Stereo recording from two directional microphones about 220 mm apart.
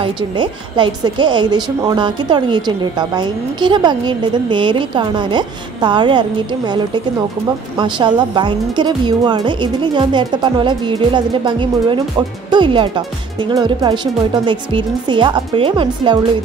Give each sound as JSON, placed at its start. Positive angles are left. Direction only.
{"t": 0.0, "sound": "a woman's voice", "side_deg": -20}